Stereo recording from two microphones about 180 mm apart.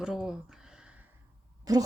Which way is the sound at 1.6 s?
20° right (ahead or behind).